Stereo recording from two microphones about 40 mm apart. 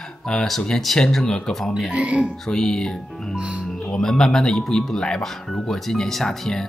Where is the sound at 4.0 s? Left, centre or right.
Centre.